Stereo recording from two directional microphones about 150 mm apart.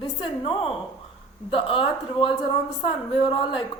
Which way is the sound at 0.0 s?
35° left (ahead or behind).